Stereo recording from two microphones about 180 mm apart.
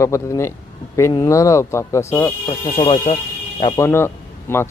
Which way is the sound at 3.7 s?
15° left (ahead or behind).